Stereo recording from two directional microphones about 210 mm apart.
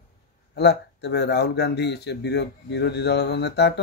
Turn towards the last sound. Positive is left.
turn(degrees=55)  # may be behind; listen again after turning